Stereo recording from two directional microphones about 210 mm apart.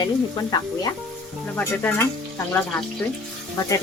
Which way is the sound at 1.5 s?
10° left (ahead or behind).